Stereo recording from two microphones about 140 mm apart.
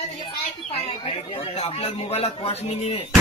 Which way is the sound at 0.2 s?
40° left (ahead or behind).